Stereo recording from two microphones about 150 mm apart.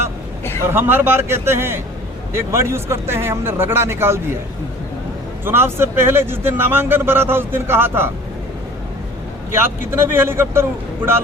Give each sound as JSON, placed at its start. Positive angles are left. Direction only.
{"t": 0.6, "sound": "a man's voice", "side_deg": -15}
{"t": 5.5, "sound": "a man's voice", "side_deg": -15}
{"t": 9.5, "sound": "a man's voice", "side_deg": -15}